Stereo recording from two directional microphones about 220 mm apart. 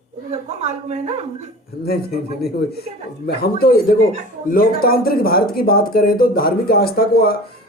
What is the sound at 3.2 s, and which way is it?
Speech, 45° left (ahead or behind).